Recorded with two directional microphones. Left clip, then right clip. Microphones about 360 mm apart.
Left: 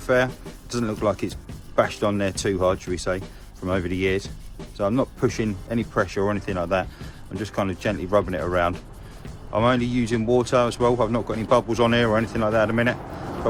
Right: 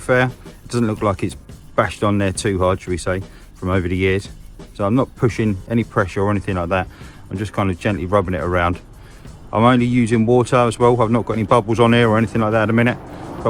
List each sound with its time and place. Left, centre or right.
0.0 s speech: centre